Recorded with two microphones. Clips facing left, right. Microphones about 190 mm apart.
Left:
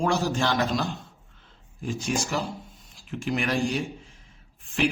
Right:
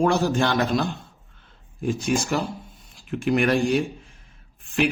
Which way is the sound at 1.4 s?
60° right (ahead or behind).